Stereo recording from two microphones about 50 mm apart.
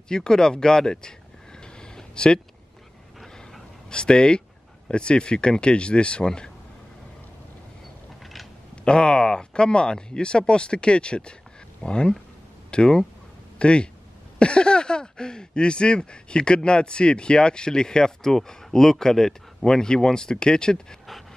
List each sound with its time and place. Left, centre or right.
0.1 s speech: centre
1.6 s a sound: centre
3.9 s speech: centre
8.8 s speech: centre